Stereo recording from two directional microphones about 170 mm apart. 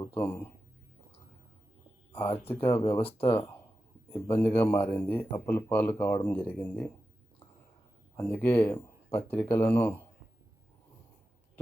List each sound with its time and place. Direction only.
0.0 s speech: 15° left (ahead or behind)
2.2 s speech: 35° left (ahead or behind)
2.5 s speech: 15° left (ahead or behind)
8.1 s speech: 15° left (ahead or behind)